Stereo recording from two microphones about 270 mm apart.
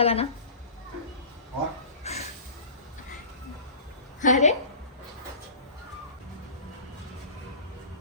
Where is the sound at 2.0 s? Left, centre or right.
Left.